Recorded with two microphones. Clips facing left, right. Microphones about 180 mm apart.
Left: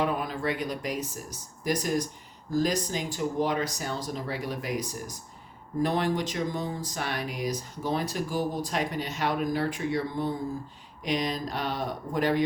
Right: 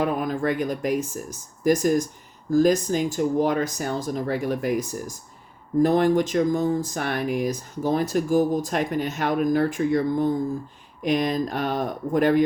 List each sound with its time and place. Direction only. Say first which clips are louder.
0.0 s speech: right 5 dB; 50° right (ahead or behind)